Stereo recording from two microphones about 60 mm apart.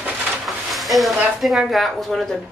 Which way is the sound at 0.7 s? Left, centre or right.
Centre.